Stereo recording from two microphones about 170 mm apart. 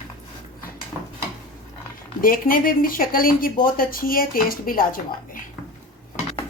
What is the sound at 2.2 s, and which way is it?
Speech, 55° left (ahead or behind).